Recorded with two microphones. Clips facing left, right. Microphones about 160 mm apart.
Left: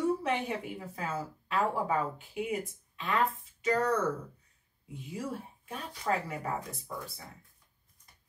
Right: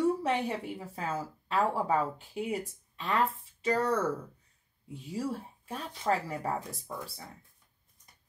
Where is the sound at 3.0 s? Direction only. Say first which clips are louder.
Right 1 dB; 30° right (ahead or behind).